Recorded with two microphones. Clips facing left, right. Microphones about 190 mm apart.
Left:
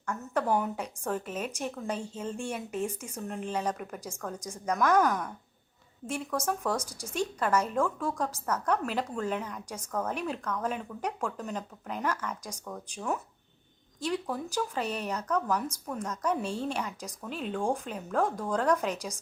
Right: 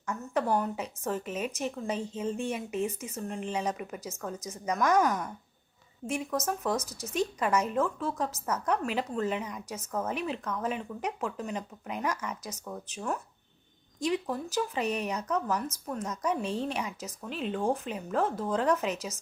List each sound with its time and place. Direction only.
0.0 s a woman's voice: 10° right (ahead or behind)
3.2 s speech: centre (ahead or behind)
3.5 s speech: 10° right (ahead or behind)
6.0 s a woman's voice: 25° right (ahead or behind)
6.4 s speech: 5° right (ahead or behind)
6.7 s speech: 10° left (ahead or behind)
7.3 s speech: 10° right (ahead or behind)